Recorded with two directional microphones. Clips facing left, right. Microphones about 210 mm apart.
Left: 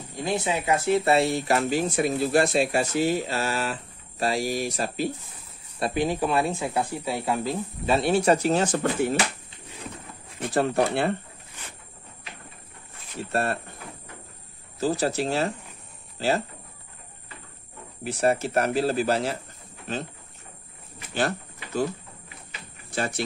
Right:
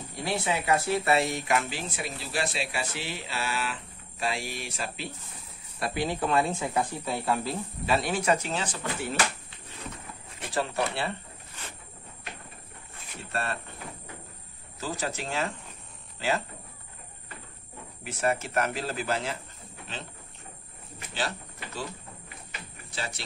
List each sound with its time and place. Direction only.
0.2 s speech: 20° left (ahead or behind); by 5.1 s 40° left (ahead or behind)
5.8 s speech: 20° left (ahead or behind)
7.9 s speech: 30° left (ahead or behind); by 9.1 s 45° left (ahead or behind)
10.5 s speech: 50° left (ahead or behind)
13.3 s speech: 45° left (ahead or behind)
14.8 s speech: 35° left (ahead or behind)
18.0 s speech: 35° left (ahead or behind)
21.1 s a sound: 50° left (ahead or behind)
22.8 s speech: 50° left (ahead or behind)